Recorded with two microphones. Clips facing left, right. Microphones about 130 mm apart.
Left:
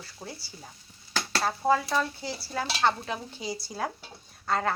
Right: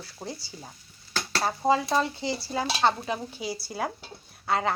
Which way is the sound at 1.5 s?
20° right (ahead or behind).